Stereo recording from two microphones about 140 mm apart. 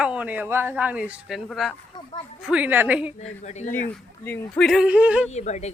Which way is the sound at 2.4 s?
10° right (ahead or behind).